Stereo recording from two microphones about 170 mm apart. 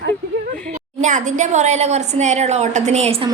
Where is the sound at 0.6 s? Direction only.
45° right (ahead or behind).